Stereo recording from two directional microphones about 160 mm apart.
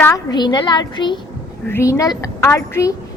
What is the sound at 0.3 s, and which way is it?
Speech, 25° left (ahead or behind).